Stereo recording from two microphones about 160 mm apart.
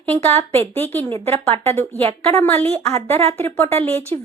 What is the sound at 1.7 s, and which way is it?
Speech, 15° left (ahead or behind).